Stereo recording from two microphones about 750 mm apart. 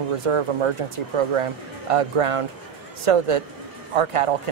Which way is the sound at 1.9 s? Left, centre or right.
Right.